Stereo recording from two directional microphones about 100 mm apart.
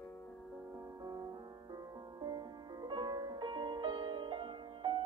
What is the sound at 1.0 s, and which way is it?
Music, 35° right (ahead or behind).